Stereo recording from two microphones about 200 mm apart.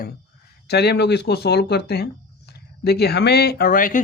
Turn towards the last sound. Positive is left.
turn(degrees=45)  # may be behind; listen again after turning